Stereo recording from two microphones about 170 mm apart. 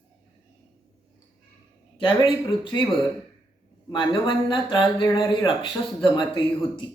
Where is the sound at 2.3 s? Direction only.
30° left (ahead or behind).